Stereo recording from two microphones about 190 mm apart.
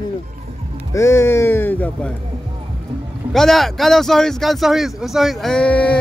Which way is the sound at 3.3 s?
Centre (ahead or behind).